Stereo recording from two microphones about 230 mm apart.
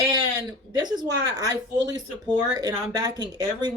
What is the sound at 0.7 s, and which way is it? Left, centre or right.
Speech, centre.